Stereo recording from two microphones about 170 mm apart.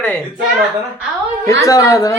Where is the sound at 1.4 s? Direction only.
20° left (ahead or behind).